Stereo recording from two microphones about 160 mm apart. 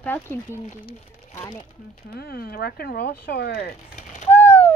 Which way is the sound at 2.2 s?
75° left (ahead or behind).